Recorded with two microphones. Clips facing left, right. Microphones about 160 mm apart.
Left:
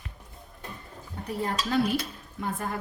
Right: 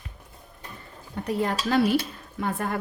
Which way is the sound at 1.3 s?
80° right.